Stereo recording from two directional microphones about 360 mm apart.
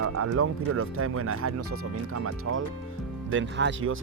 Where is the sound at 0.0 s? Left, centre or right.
Right.